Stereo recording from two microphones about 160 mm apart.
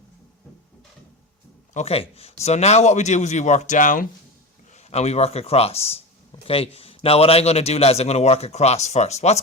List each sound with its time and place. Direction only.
1.7 s a man's voice: 40° left (ahead or behind); by 4.0 s 55° left (ahead or behind)
4.7 s a man's voice: 45° left (ahead or behind)